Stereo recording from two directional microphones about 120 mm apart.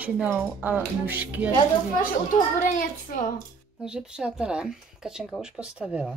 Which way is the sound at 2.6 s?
90° left.